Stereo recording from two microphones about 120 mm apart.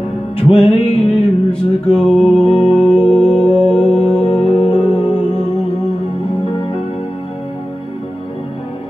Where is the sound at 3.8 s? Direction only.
65° left (ahead or behind).